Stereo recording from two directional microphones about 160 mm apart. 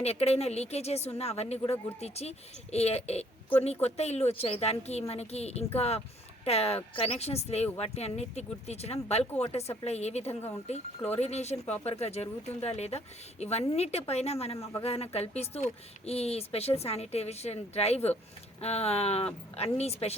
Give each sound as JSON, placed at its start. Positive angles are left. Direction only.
{"t": 0.0, "sound": "speech", "side_deg": 40}